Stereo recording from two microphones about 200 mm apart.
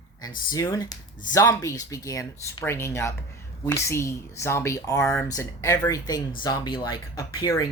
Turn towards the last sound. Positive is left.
turn(degrees=20)  # may be behind; listen again after turning